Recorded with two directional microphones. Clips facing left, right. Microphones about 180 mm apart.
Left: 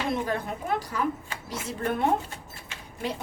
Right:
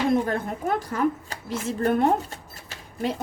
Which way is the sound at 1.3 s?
40° right (ahead or behind).